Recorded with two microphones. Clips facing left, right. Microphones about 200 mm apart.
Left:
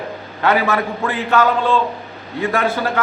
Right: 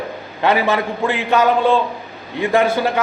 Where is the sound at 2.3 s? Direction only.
20° right (ahead or behind).